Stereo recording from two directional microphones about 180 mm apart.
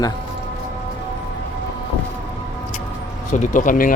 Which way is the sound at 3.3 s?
45° left (ahead or behind).